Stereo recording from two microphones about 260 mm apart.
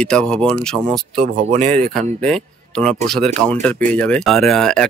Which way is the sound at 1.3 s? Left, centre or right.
Right.